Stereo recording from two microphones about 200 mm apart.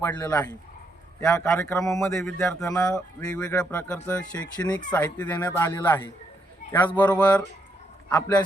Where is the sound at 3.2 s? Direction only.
5° left (ahead or behind).